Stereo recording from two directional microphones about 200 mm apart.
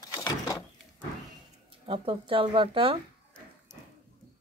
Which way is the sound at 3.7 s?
20° left (ahead or behind).